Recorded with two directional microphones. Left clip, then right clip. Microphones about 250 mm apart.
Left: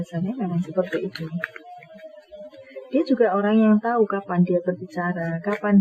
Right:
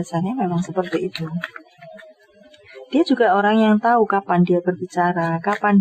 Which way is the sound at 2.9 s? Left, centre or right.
Right.